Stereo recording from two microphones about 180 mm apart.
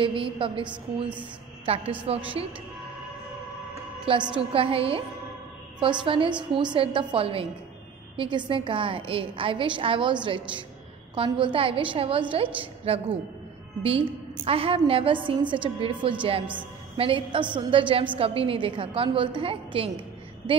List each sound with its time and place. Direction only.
0.0 s a woman's voice: 30° right (ahead or behind)
4.1 s a woman's voice: 30° right (ahead or behind)